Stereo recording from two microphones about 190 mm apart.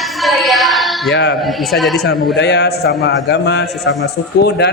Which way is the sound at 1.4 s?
Centre (ahead or behind).